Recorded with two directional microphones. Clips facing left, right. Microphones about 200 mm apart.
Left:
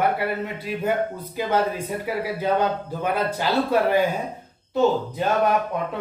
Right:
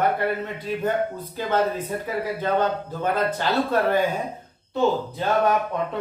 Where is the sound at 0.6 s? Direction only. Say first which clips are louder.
Left 1 dB; 10° left (ahead or behind).